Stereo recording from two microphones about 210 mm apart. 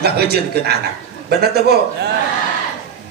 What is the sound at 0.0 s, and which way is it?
Speech, 50° right (ahead or behind).